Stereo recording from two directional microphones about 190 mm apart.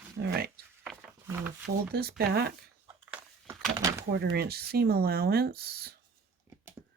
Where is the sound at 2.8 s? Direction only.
10° right (ahead or behind).